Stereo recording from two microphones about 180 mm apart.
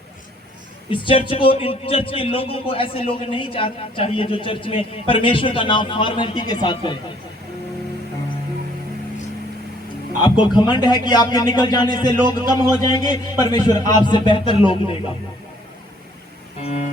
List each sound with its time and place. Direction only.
0.9 s speech: 30° left (ahead or behind)
10.2 s speech: 25° left (ahead or behind)
16.6 s music: 35° left (ahead or behind)